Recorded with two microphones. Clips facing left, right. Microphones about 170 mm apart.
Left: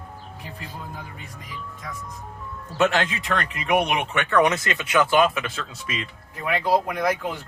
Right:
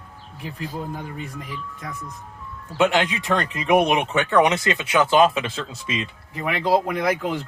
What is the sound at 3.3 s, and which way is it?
Speech, 30° right (ahead or behind).